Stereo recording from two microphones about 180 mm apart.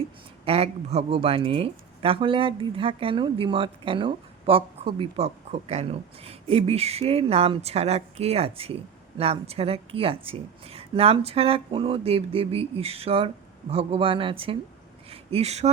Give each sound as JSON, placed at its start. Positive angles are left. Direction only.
{"t": 0.4, "sound": "speech", "side_deg": -35}